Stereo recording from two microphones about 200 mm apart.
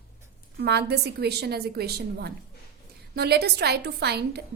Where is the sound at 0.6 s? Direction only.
55° right (ahead or behind).